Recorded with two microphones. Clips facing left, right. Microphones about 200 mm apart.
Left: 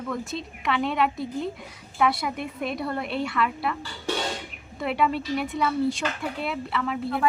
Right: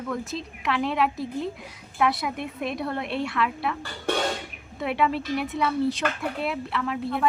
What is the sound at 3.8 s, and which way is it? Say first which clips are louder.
Speech: right 2 dB; 55° right (ahead or behind).